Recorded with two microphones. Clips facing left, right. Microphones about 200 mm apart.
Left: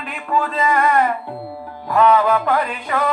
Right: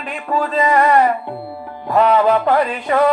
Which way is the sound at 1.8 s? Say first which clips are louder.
Right 1 dB; 30° right (ahead or behind).